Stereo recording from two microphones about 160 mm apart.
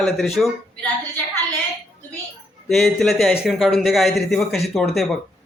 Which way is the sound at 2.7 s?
Centre (ahead or behind).